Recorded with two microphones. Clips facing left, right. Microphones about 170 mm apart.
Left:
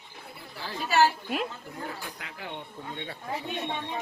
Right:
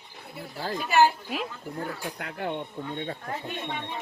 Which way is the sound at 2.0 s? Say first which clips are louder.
Right 8 dB; 55° right (ahead or behind).